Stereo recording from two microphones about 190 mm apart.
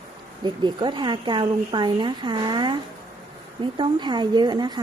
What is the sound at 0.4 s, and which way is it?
Speech, 25° right (ahead or behind).